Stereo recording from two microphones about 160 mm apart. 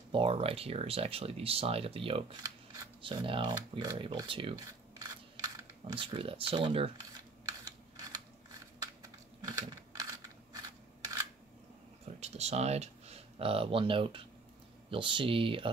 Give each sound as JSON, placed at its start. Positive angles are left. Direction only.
{"t": 0.1, "sound": "speech", "side_deg": -35}
{"t": 7.6, "sound": "typing", "side_deg": -25}
{"t": 9.4, "sound": "a sound", "side_deg": -25}
{"t": 12.2, "sound": "speech", "side_deg": -40}